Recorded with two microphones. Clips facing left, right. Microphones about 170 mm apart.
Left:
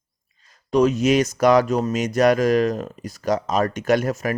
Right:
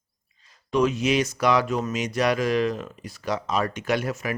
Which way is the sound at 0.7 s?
40° left (ahead or behind).